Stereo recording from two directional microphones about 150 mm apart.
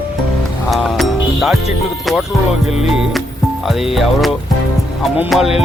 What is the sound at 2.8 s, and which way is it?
Speech, centre (ahead or behind).